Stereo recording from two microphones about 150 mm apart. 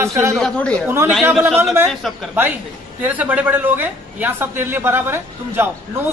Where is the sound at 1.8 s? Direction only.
Centre (ahead or behind).